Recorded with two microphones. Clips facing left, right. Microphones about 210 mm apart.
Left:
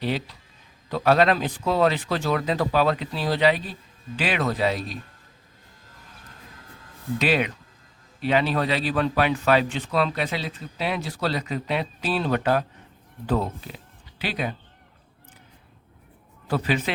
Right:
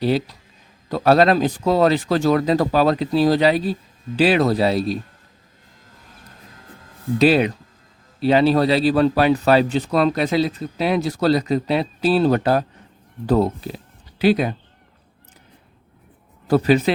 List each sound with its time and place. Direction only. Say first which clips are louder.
0.0 s a man's voice: right 8 dB; 35° right (ahead or behind)
7.2 s a man's voice: right 8 dB; 35° right (ahead or behind)
16.5 s a man's voice: right 9 dB; 40° right (ahead or behind)